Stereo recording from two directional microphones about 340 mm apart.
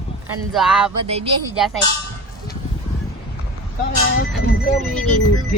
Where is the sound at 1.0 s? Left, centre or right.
Centre.